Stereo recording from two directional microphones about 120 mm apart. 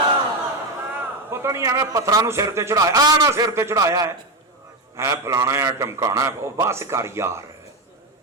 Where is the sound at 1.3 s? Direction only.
25° right (ahead or behind).